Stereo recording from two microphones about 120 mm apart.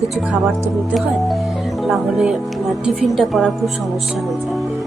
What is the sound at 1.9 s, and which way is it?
A woman's voice, 5° right (ahead or behind).